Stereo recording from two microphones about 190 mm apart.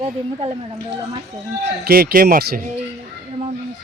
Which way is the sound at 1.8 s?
50° right (ahead or behind).